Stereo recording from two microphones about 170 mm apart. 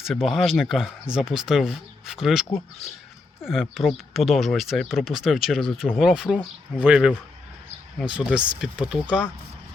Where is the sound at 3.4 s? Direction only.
Centre (ahead or behind).